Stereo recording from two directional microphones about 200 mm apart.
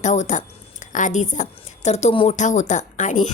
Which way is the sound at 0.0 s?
35° left (ahead or behind).